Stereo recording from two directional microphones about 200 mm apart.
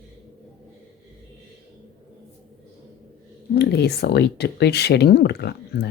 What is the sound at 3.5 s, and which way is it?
Speech, 55° left (ahead or behind).